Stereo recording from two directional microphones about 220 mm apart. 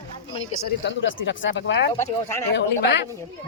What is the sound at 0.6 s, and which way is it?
Speech, 55° left (ahead or behind).